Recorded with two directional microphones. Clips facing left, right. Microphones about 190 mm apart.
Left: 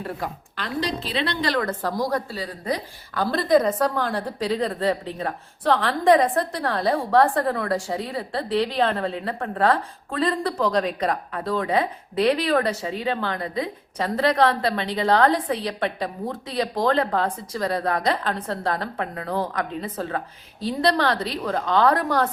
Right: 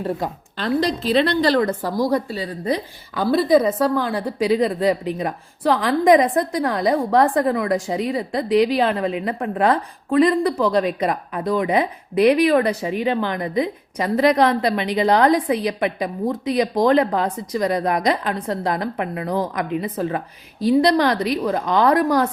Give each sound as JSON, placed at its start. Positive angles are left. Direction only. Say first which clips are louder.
{"t": 0.2, "sound": "a woman's voice", "louder": "right 5 dB", "side_deg": -30}
{"t": 0.8, "sound": "a woman's voice", "louder": "right 7 dB", "side_deg": -45}
{"t": 2.0, "sound": "a woman's voice", "louder": "right 5 dB", "side_deg": -10}
{"t": 3.3, "sound": "a woman's voice", "louder": "right 3 dB", "side_deg": -5}